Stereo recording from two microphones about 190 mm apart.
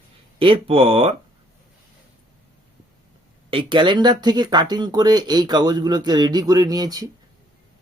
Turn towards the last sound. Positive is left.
turn(degrees=-20)  # may be behind; listen again after turning